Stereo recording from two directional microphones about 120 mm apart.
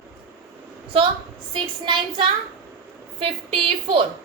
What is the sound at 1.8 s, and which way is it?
Speech, 40° right (ahead or behind).